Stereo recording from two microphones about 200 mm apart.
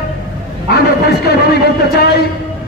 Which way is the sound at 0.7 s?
55° left (ahead or behind).